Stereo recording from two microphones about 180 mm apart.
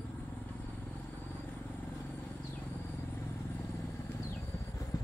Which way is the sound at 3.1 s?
15° left (ahead or behind).